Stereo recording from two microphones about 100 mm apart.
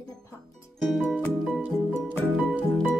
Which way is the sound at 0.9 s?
Centre (ahead or behind).